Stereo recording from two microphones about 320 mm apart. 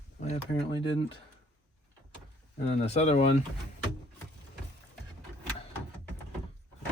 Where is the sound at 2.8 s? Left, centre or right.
Centre.